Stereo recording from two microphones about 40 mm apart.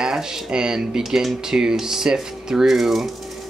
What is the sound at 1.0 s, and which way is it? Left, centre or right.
Speech, centre.